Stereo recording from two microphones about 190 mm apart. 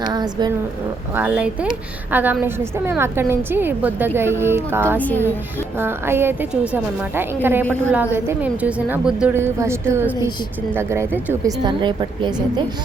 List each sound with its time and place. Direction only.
0.0 s a woman's voice: 20° right (ahead or behind)
1.1 s a woman's voice: 10° right (ahead or behind)
4.9 s a woman's voice: 10° left (ahead or behind)
5.7 s a woman's voice: 10° right (ahead or behind)
11.6 s a woman's voice: 25° right (ahead or behind)